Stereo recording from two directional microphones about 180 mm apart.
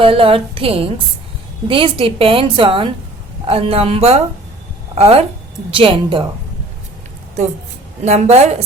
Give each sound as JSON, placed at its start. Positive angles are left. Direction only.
{"t": 0.0, "sound": "a woman's voice", "side_deg": -30}
{"t": 8.0, "sound": "a woman's voice", "side_deg": -40}